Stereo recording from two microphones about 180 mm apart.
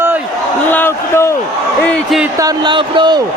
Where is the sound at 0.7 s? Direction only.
10° left (ahead or behind).